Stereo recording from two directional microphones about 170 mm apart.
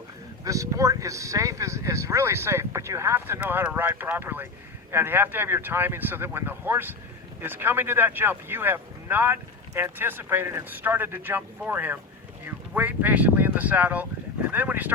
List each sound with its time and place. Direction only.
0.4 s speech: 20° right (ahead or behind)